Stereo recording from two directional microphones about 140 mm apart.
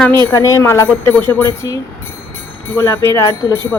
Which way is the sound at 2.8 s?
20° left (ahead or behind).